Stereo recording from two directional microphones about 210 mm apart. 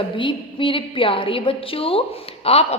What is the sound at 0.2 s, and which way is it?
A woman's voice, 25° left (ahead or behind).